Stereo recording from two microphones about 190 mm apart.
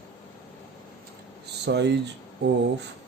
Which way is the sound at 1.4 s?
60° right (ahead or behind).